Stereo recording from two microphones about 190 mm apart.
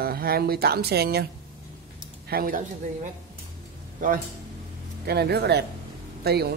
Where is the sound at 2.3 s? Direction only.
50° right (ahead or behind).